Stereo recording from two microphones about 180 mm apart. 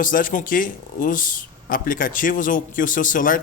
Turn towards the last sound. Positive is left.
turn(degrees=50)  # may be behind; listen again after turning